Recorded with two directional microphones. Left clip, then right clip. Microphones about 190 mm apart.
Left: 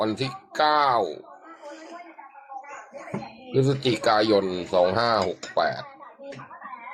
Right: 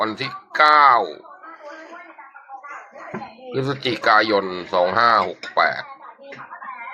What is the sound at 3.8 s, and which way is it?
Speech, 20° left (ahead or behind).